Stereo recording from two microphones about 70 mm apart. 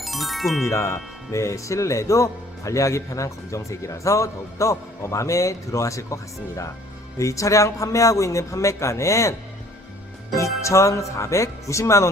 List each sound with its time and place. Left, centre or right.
0.0 s music: centre
0.6 s speech: left
7.2 s speech: left
10.3 s speech: left